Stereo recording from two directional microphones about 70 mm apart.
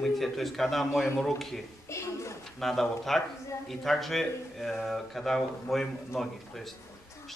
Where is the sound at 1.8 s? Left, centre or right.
Left.